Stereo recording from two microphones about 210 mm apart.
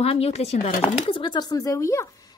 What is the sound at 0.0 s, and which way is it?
Speech, 30° left (ahead or behind).